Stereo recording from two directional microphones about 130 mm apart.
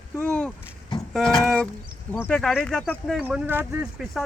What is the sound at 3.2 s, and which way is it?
Speech, 15° right (ahead or behind).